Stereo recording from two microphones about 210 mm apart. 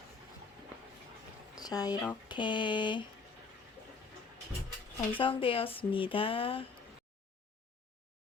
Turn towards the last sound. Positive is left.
turn(degrees=25)  # may be behind; listen again after turning